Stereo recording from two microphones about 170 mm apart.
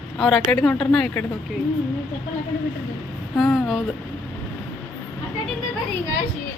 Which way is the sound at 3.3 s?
Centre (ahead or behind).